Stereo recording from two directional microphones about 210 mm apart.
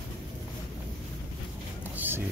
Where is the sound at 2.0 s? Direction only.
10° right (ahead or behind).